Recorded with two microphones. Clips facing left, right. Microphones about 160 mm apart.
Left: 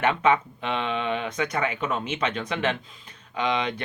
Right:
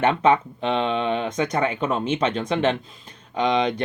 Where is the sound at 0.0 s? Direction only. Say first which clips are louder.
Right 3 dB; 30° right (ahead or behind).